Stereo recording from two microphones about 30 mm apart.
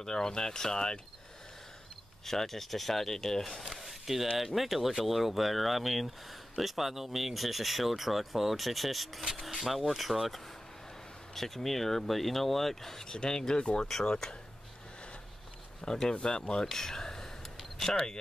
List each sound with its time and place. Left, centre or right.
0.0 s speech: left
2.2 s speech: centre
3.6 s a sound: centre
4.6 s speech: centre
11.3 s speech: centre
13.0 s speech: left
15.8 s speech: left